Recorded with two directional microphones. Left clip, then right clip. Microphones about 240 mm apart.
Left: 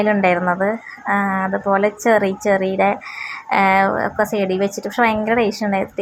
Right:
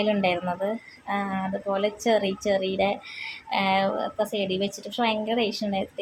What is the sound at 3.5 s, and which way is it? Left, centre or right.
A woman's voice, centre.